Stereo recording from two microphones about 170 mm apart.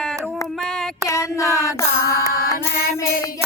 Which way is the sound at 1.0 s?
20° left (ahead or behind).